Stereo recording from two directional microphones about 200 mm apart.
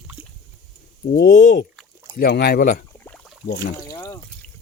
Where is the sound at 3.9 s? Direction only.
20° left (ahead or behind).